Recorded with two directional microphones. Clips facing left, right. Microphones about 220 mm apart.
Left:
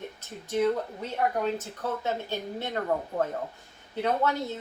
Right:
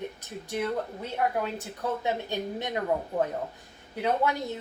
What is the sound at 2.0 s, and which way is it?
Speech, 15° right (ahead or behind).